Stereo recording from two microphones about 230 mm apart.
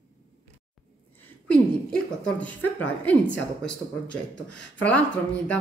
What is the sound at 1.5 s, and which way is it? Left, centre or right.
Speech, centre.